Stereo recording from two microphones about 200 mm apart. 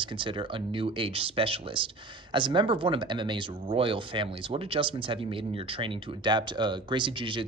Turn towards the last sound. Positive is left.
turn(degrees=-25)  # may be behind; listen again after turning